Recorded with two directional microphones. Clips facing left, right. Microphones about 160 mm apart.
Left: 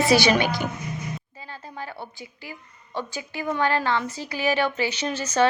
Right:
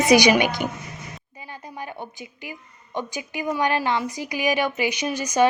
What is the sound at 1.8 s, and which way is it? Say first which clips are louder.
A woman's voice: right 2 dB; 20° right (ahead or behind).